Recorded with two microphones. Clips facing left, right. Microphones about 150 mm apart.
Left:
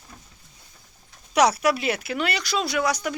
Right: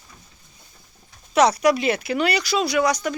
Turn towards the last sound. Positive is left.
turn(degrees=5)  # may be behind; listen again after turning